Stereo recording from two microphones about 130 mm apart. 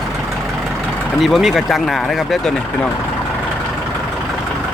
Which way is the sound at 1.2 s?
Centre (ahead or behind).